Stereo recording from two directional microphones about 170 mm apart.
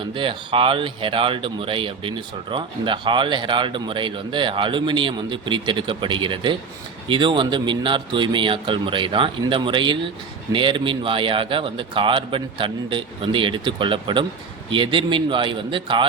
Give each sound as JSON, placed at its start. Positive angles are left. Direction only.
{"t": 0.0, "sound": "speech", "side_deg": -30}